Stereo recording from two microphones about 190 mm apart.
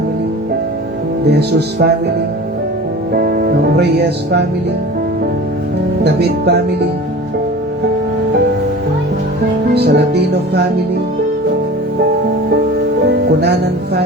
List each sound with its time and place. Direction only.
1.3 s speech: 60° right (ahead or behind)
3.1 s speech: 50° right (ahead or behind)
6.1 s speech: 60° right (ahead or behind)
9.7 s speech: 60° right (ahead or behind)
13.1 s music: 60° right (ahead or behind)